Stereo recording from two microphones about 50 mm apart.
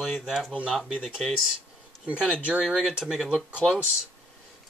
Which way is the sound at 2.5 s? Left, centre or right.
Centre.